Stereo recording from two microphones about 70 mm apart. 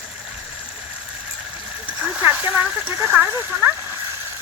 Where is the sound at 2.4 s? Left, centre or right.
Right.